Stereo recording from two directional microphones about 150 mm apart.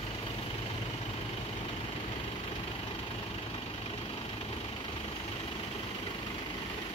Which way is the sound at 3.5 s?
40° left (ahead or behind).